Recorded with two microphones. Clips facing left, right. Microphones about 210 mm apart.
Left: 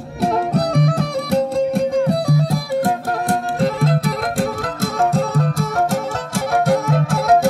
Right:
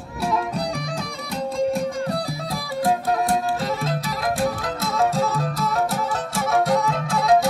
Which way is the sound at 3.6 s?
60° left (ahead or behind).